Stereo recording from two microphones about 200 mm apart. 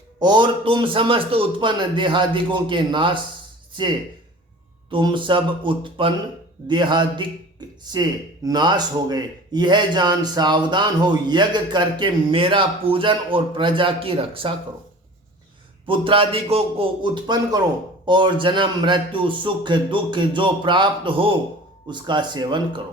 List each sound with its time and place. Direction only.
0.2 s a man's voice: 20° right (ahead or behind)
4.9 s a man's voice: 25° right (ahead or behind)
15.9 s a man's voice: 25° right (ahead or behind)